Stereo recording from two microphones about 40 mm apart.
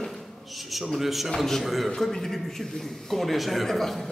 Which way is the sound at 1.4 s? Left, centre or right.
Centre.